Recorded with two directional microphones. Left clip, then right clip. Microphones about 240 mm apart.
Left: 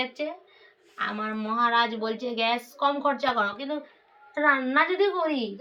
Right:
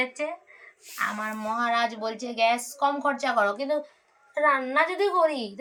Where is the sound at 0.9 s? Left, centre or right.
Centre.